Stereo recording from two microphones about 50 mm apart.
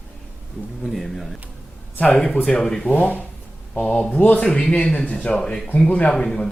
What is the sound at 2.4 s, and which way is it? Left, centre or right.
Speech, centre.